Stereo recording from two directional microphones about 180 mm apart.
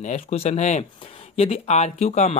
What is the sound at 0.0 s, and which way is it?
Speech, 40° left (ahead or behind).